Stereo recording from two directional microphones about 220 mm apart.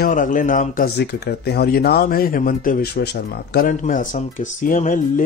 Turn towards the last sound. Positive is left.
turn(degrees=35)  # may be behind; listen again after turning